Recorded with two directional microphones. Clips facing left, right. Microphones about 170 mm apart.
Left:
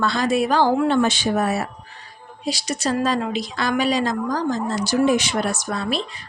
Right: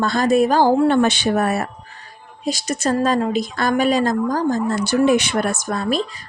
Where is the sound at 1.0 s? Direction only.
65° right (ahead or behind).